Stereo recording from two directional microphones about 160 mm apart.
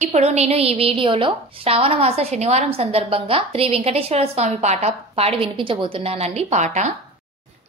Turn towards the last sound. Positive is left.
turn(degrees=-45)  # may be behind; listen again after turning